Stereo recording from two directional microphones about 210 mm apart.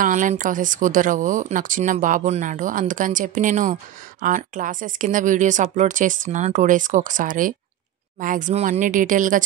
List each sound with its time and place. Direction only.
0.0 s speech: 35° right (ahead or behind)